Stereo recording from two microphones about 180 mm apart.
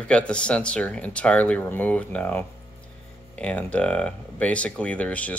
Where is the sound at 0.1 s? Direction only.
5° left (ahead or behind).